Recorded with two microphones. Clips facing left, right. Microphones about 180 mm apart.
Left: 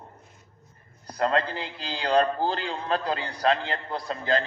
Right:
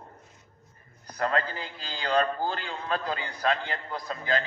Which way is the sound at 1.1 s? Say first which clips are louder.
Left 3 dB; 30° left (ahead or behind).